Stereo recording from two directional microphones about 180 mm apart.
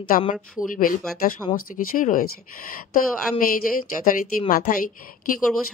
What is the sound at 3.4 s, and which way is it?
Speech, 50° left (ahead or behind).